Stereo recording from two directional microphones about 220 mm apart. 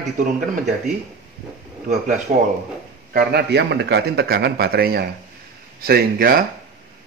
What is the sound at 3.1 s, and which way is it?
A man's voice, 50° right (ahead or behind).